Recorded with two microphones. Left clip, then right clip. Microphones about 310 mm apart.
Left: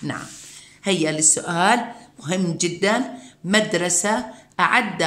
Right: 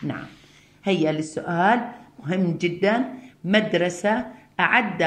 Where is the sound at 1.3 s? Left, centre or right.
Left.